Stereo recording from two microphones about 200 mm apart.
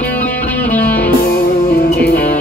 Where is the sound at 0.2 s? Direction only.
10° left (ahead or behind).